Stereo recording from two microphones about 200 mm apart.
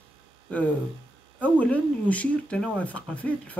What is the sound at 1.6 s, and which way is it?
Speech, 5° left (ahead or behind).